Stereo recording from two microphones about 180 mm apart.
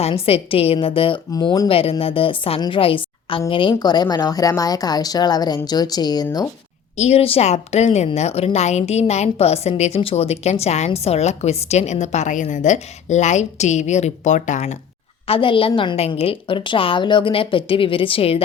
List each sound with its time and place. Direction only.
0.0 s a woman's voice: 30° left (ahead or behind)
6.9 s speech: 40° left (ahead or behind)
15.3 s a woman's voice: 30° left (ahead or behind)